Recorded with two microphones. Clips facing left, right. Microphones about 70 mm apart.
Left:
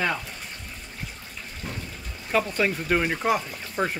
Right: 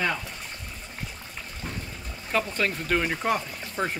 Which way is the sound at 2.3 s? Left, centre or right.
Centre.